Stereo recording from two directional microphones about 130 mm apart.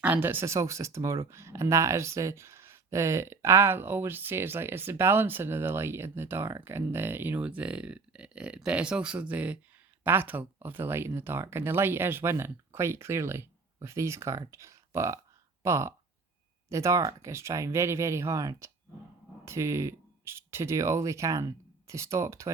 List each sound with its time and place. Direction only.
0.0 s speech: 15° right (ahead or behind)